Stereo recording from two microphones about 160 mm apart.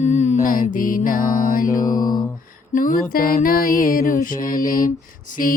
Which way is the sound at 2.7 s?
60° left (ahead or behind).